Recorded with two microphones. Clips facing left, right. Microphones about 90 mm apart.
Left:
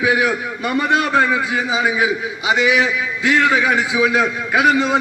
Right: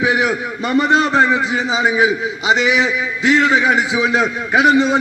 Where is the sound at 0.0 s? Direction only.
25° right (ahead or behind).